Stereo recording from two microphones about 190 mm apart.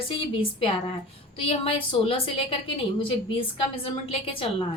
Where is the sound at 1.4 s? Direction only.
30° left (ahead or behind).